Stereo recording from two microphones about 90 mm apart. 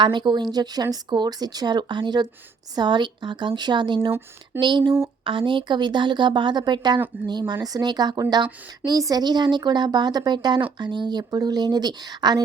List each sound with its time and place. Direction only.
0.0 s a woman's voice: 60° right (ahead or behind)